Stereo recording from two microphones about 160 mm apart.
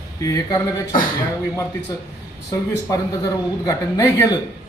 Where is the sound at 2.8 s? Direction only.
25° left (ahead or behind).